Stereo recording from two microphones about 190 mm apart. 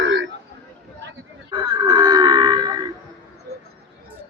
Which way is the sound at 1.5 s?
25° right (ahead or behind).